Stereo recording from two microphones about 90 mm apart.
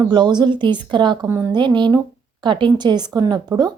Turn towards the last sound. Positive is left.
turn(degrees=-50)  # may be behind; listen again after turning